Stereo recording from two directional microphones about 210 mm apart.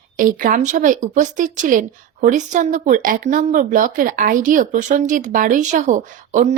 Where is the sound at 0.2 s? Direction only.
40° right (ahead or behind).